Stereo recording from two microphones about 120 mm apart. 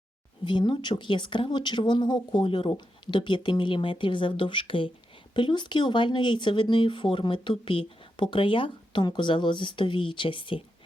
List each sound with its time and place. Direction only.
0.4 s speech: 40° left (ahead or behind)